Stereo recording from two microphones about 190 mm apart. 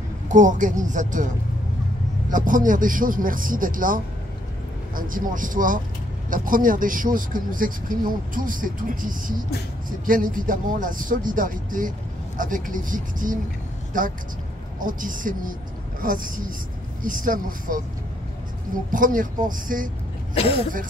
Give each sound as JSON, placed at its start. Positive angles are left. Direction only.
{"t": 0.3, "sound": "speech", "side_deg": -40}
{"t": 2.3, "sound": "speech", "side_deg": -45}
{"t": 18.9, "sound": "speech", "side_deg": -45}